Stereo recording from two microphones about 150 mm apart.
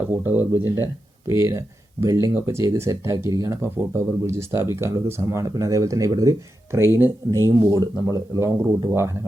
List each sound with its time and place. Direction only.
0.1 s speech: 15° right (ahead or behind)